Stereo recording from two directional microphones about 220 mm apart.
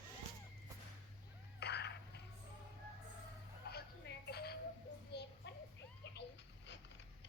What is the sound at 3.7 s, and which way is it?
Music, 45° left (ahead or behind).